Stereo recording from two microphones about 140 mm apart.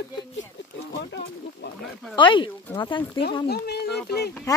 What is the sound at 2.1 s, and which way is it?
Speech, 35° left (ahead or behind).